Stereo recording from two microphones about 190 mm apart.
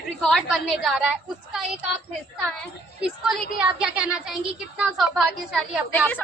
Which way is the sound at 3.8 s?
5° right (ahead or behind).